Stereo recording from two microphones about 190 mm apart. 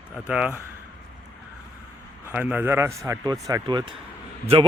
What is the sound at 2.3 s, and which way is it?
Speech, 10° right (ahead or behind).